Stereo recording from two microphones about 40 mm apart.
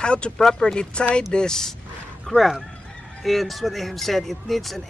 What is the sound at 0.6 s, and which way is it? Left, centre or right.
Speech, centre.